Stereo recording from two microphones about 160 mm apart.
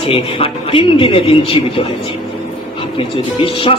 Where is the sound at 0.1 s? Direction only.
35° left (ahead or behind).